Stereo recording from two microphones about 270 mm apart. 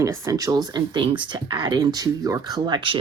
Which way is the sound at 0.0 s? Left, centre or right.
Centre.